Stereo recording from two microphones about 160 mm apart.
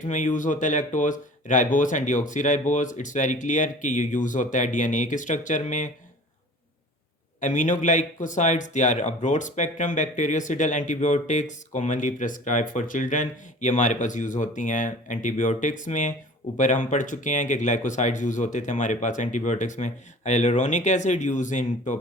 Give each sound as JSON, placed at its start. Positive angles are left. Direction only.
{"t": 0.0, "sound": "speech", "side_deg": 50}
{"t": 7.4, "sound": "speech", "side_deg": 50}